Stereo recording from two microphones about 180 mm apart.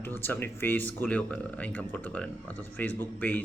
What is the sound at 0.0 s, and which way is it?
Speech, 10° left (ahead or behind).